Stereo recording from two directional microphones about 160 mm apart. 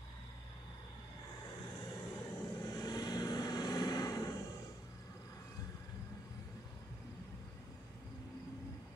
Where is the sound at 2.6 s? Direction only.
25° left (ahead or behind).